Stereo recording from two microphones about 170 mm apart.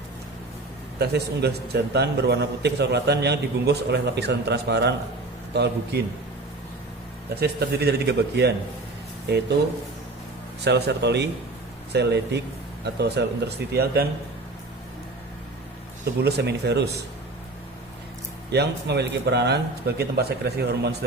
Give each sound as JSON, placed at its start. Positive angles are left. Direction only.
{"t": 0.9, "sound": "a man's voice", "side_deg": -75}
{"t": 7.3, "sound": "a man's voice", "side_deg": -70}
{"t": 10.6, "sound": "a man's voice", "side_deg": -80}
{"t": 16.2, "sound": "a man's voice", "side_deg": -75}
{"t": 18.5, "sound": "a man's voice", "side_deg": -75}